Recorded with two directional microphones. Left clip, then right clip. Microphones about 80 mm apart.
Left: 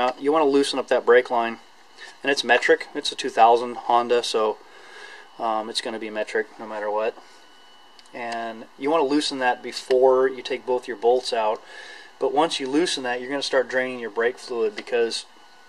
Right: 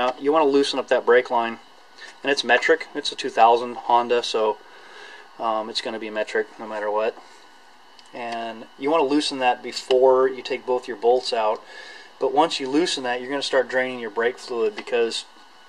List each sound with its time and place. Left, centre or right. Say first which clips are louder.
0.2 s speech: right 2 dB; centre
8.4 s speech: even; centre